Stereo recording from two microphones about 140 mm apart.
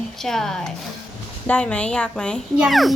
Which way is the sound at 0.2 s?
5° left (ahead or behind).